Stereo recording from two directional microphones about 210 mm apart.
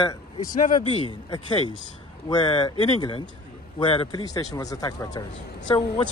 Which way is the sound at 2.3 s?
20° left (ahead or behind).